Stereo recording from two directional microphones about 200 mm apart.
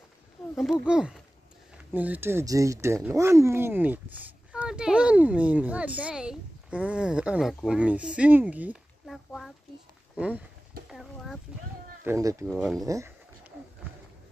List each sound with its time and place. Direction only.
0.4 s wild animals: centre (ahead or behind)
0.8 s a child's voice: 5° right (ahead or behind)
10.9 s a sound: centre (ahead or behind)
12.0 s speech: 15° right (ahead or behind)
12.4 s a child's voice: centre (ahead or behind)
12.8 s speech: 15° right (ahead or behind)